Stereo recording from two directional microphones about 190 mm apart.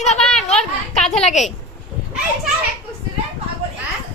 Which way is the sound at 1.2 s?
40° left (ahead or behind).